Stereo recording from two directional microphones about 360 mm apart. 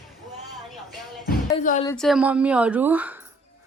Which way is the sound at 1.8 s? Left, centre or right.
Centre.